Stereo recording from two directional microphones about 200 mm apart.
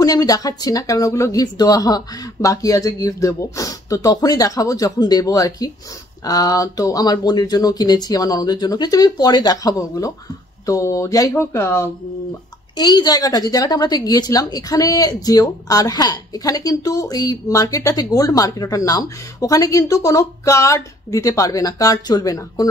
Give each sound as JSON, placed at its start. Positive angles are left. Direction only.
{"t": 0.0, "sound": "a woman's voice", "side_deg": 20}